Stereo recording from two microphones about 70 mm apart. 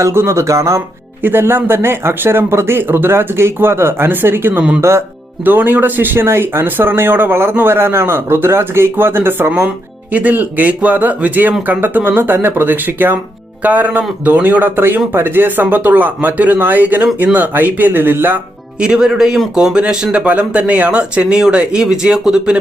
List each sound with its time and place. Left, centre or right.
0.0 s speech: right
1.2 s speech: right
4.8 s speech: right
5.5 s a man's voice: right
18.8 s speech: centre